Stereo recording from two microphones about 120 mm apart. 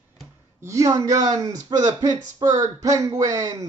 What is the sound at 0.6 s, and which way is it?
Speech, 25° right (ahead or behind).